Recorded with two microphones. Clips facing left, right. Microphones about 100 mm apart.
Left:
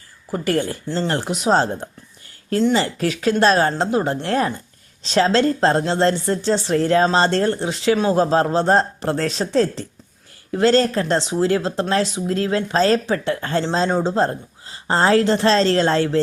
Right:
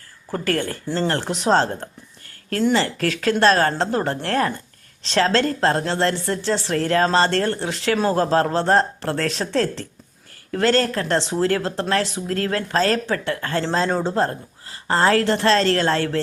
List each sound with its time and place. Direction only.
0.3 s a woman's voice: 10° left (ahead or behind)
3.0 s a woman's voice: 15° left (ahead or behind)